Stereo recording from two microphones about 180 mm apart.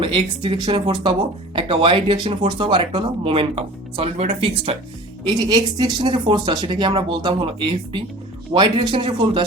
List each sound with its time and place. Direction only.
0.0 s speech: 30° right (ahead or behind)
5.3 s speech: 20° right (ahead or behind)